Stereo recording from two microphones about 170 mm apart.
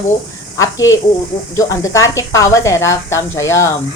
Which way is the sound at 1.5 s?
20° left (ahead or behind).